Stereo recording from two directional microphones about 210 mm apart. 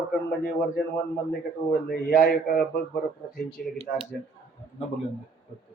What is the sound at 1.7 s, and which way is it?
Speech, 40° left (ahead or behind).